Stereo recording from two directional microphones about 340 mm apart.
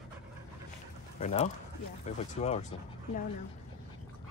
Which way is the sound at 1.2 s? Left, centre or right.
Centre.